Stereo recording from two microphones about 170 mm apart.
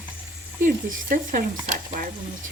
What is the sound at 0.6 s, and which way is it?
A woman's voice, 50° right (ahead or behind).